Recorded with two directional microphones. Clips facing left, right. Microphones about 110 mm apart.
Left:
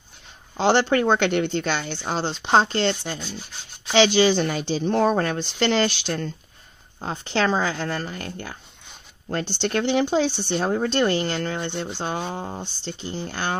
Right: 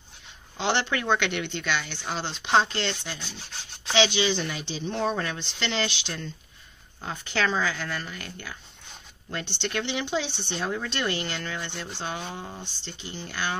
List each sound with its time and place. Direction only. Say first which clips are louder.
0.6 s speech: left 8 dB; 35° left (ahead or behind)
7.0 s speech: left 5 dB; 30° left (ahead or behind)
10.3 s speech: left 9 dB; 5° left (ahead or behind)
10.6 s speech: left 8 dB; 40° left (ahead or behind)